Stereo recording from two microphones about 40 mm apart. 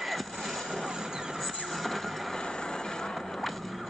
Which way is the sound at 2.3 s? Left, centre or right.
Left.